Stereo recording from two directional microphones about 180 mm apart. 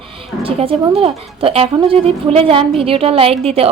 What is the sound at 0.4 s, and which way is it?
A woman's voice, 30° right (ahead or behind).